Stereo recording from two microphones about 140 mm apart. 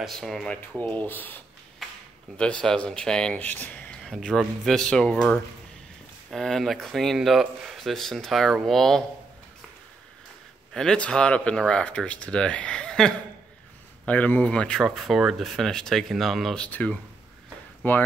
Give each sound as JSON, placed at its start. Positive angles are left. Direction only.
{"t": 0.0, "sound": "speech", "side_deg": 0}
{"t": 10.7, "sound": "speech", "side_deg": 5}